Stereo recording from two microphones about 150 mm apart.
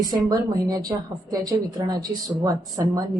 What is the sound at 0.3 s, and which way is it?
Speech, 25° right (ahead or behind).